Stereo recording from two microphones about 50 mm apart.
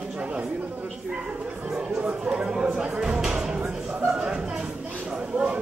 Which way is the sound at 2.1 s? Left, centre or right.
Right.